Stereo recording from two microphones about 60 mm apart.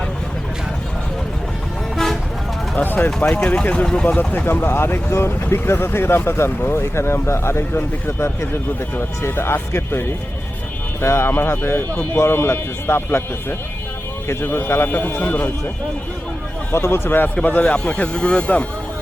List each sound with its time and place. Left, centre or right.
2.7 s speech: left
3.1 s speech: centre; by 15.4 s left
16.7 s speech: left